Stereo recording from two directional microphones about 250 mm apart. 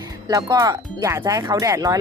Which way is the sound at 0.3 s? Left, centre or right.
Centre.